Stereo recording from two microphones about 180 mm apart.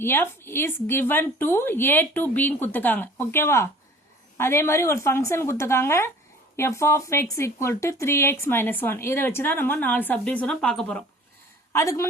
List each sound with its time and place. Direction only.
0.0 s speech: 15° left (ahead or behind)
11.7 s speech: 15° left (ahead or behind)